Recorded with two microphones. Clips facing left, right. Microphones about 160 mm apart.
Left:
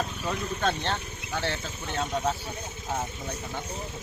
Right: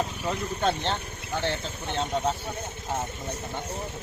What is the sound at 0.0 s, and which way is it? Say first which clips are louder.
Speech: right 2 dB; 20° right (ahead or behind).